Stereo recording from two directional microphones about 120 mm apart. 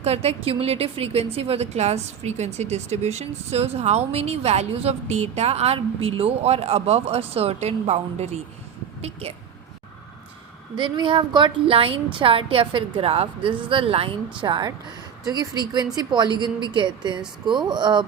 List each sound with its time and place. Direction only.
0.0 s a woman's voice: 60° right (ahead or behind)
10.8 s a woman's voice: 45° right (ahead or behind)
14.4 s a woman's voice: 40° right (ahead or behind)